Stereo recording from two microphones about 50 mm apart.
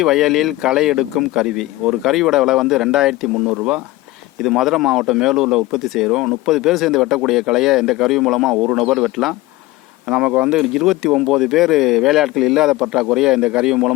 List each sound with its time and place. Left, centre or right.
0.0 s speech: centre
4.4 s speech: centre
6.1 s speech: centre
10.1 s speech: right
10.5 s speech: centre